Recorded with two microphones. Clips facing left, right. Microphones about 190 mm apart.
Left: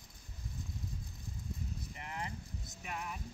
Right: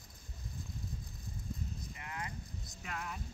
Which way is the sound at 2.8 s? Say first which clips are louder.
Even; 15° left (ahead or behind).